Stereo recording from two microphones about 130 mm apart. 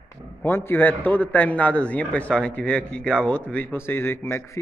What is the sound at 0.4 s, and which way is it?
A man's voice, 20° left (ahead or behind).